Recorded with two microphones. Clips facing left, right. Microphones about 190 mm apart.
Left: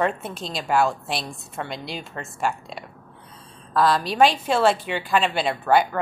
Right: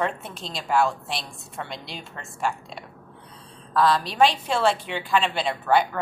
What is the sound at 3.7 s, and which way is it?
Speech, 40° left (ahead or behind).